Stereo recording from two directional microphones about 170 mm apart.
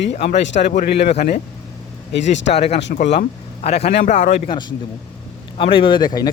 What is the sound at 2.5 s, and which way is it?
Speech, 40° left (ahead or behind).